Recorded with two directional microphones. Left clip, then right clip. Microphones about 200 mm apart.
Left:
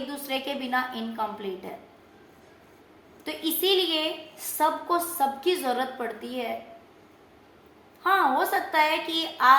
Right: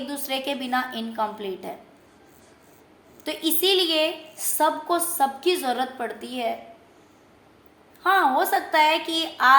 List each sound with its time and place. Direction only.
0.1 s a woman's voice: 50° right (ahead or behind)
3.2 s a woman's voice: 50° right (ahead or behind)
8.0 s a woman's voice: 45° right (ahead or behind)